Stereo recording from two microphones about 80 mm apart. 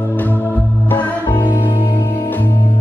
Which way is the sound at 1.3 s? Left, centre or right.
Left.